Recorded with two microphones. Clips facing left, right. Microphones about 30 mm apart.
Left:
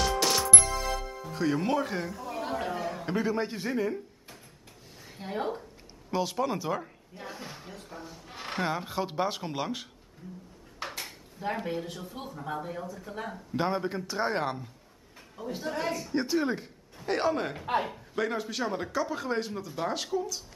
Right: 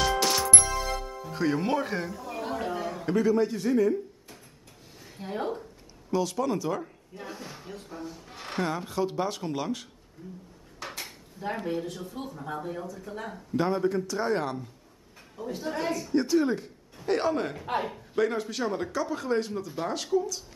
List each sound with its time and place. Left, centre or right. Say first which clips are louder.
0.0 s music: right 2 dB; centre
1.2 s speech: right 1 dB; centre
3.2 s a man's voice: right 6 dB; left
5.0 s a sound: right 1 dB; centre
6.1 s speech: right 2 dB; left
10.9 s speech: even; centre
13.6 s a man's voice: right 4 dB; centre
15.3 s a man's voice: right 1 dB; centre